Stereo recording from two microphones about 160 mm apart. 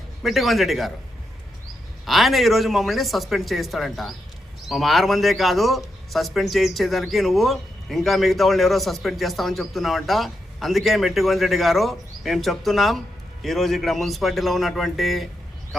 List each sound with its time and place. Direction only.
0.2 s speech: centre (ahead or behind)
2.0 s speech: centre (ahead or behind)